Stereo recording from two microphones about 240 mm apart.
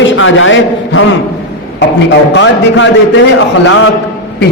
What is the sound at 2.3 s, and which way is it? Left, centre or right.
Speech, left.